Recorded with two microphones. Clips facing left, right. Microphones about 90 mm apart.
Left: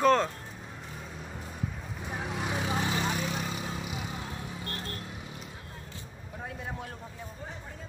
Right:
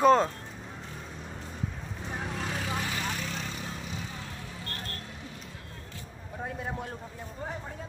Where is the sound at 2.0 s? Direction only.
5° left (ahead or behind).